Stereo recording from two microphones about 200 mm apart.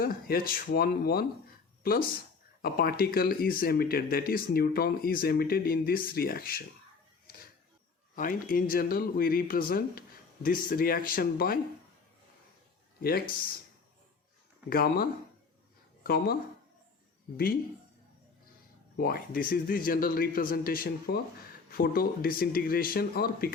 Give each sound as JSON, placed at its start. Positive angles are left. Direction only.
{"t": 0.0, "sound": "speech", "side_deg": 45}
{"t": 8.1, "sound": "speech", "side_deg": 45}
{"t": 13.0, "sound": "speech", "side_deg": 50}
{"t": 14.7, "sound": "speech", "side_deg": 50}
{"t": 18.9, "sound": "speech", "side_deg": 50}